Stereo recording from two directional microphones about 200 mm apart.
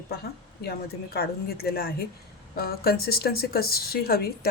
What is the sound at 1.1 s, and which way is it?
Speech, 50° left (ahead or behind).